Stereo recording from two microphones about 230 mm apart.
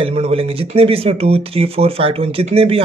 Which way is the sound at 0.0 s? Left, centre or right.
Right.